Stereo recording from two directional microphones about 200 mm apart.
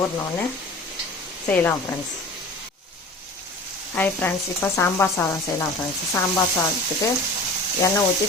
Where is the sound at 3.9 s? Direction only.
10° left (ahead or behind).